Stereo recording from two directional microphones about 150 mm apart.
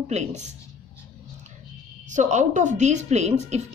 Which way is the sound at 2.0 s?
55° right (ahead or behind).